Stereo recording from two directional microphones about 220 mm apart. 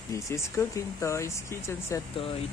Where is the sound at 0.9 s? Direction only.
10° left (ahead or behind).